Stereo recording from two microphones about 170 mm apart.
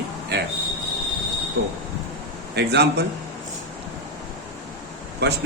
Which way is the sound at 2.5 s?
80° right.